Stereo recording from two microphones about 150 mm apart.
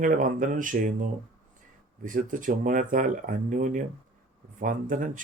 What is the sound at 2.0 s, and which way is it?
Speech, 60° right (ahead or behind).